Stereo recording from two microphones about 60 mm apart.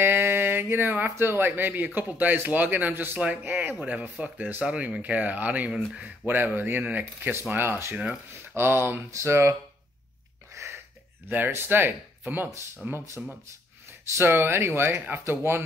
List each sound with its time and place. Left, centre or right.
0.0 s a sound: right
1.1 s speech: right
3.2 s speech: right
7.9 s speech: right
8.3 s speech: right
9.1 s speech: right
10.5 s a sound: right
11.2 s speech: right
14.1 s speech: right